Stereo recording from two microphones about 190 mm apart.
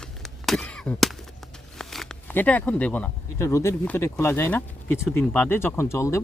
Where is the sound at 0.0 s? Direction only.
Centre (ahead or behind).